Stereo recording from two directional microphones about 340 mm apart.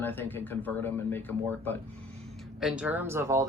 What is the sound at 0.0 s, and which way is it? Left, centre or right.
Speech, centre.